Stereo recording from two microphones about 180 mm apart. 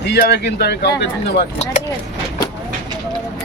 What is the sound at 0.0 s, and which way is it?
Speech, 70° left (ahead or behind).